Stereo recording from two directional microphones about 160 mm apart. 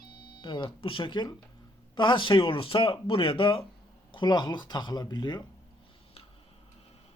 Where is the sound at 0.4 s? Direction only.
30° left (ahead or behind).